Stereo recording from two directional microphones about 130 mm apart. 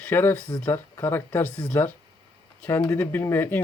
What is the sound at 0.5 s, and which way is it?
Speech, 25° left (ahead or behind).